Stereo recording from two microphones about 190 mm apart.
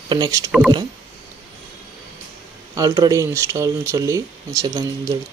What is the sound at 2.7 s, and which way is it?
Speech, 20° right (ahead or behind).